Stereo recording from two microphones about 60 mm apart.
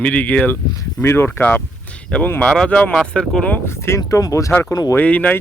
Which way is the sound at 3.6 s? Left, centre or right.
Left.